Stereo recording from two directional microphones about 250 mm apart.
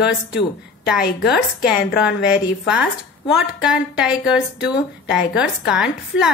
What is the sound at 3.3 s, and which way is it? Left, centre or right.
A woman's voice, centre.